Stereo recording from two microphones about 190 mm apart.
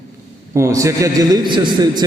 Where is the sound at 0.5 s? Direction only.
15° right (ahead or behind).